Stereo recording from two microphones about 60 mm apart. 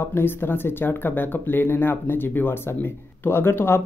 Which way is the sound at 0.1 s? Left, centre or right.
Left.